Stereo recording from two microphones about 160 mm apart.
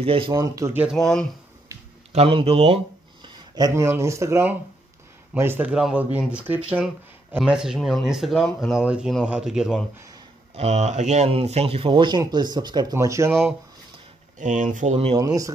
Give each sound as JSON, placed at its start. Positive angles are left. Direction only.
{"t": 0.0, "sound": "speech", "side_deg": -35}
{"t": 0.3, "sound": "speech", "side_deg": -20}
{"t": 0.7, "sound": "speech", "side_deg": 0}
{"t": 2.1, "sound": "speech", "side_deg": -35}
{"t": 3.5, "sound": "speech", "side_deg": -20}
{"t": 10.5, "sound": "speech", "side_deg": -40}
{"t": 14.4, "sound": "speech", "side_deg": -55}
{"t": 15.1, "sound": "speech", "side_deg": -20}